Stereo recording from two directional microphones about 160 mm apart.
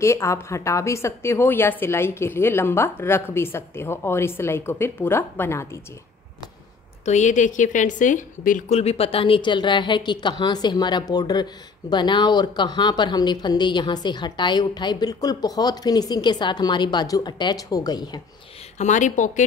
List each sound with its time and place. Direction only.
0.0 s a woman's voice: 15° left (ahead or behind)
7.1 s a woman's voice: 50° left (ahead or behind); by 18.2 s 25° left (ahead or behind)
18.8 s a woman's voice: 50° left (ahead or behind)